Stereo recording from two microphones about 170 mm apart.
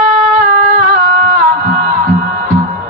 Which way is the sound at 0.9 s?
55° right (ahead or behind).